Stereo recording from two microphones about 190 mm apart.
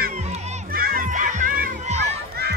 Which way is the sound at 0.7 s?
50° right (ahead or behind).